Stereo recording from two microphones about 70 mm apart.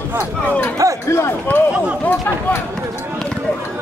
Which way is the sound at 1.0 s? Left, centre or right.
Left.